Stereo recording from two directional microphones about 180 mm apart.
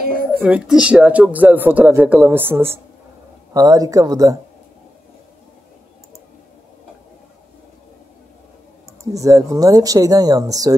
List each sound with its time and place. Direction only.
0.4 s speech: 10° right (ahead or behind)
9.0 s speech: 20° right (ahead or behind)